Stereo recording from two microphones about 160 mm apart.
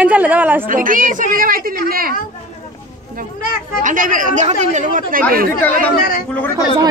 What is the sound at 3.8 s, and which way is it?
A woman's voice, 55° right (ahead or behind).